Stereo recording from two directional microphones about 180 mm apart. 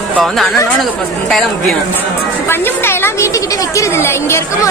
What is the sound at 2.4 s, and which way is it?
A woman's voice, 15° left (ahead or behind).